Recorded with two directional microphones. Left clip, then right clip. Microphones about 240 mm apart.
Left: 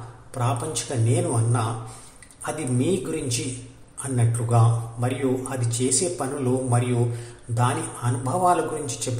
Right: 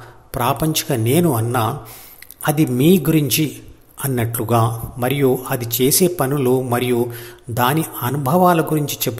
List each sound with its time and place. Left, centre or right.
0.3 s a man's voice: right